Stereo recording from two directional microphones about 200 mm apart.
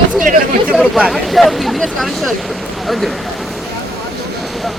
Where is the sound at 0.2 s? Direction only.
40° right (ahead or behind).